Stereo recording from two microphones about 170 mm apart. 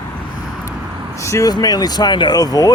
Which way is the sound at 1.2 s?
20° left (ahead or behind).